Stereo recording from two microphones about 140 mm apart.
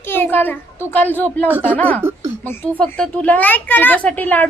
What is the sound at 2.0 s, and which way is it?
Speech, 15° right (ahead or behind).